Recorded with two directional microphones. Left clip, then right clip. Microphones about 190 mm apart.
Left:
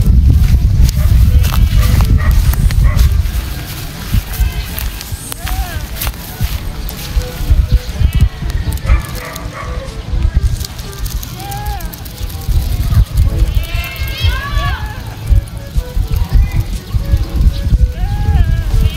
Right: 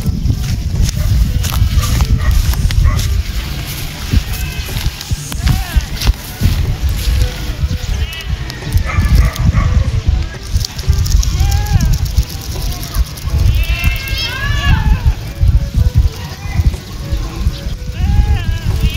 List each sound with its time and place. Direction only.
1.4 s music: 10° left (ahead or behind)
8.8 s dog: 50° left (ahead or behind)
14.2 s run: 55° left (ahead or behind)